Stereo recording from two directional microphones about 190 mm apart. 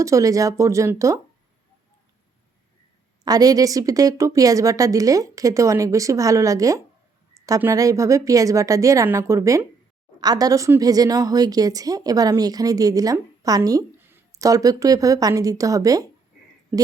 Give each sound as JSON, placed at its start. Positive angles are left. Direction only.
{"t": 0.0, "sound": "a woman's voice", "side_deg": -15}
{"t": 3.2, "sound": "a woman's voice", "side_deg": -20}